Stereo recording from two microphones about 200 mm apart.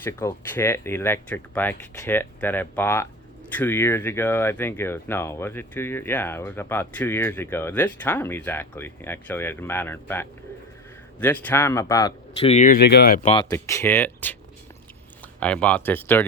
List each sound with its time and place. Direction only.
0.0 s speech: 15° left (ahead or behind)
12.4 s speech: 35° left (ahead or behind); by 13.1 s 55° left (ahead or behind)
13.2 s speech: 25° left (ahead or behind)
13.5 s speech: 15° left (ahead or behind)
15.4 s speech: 5° left (ahead or behind)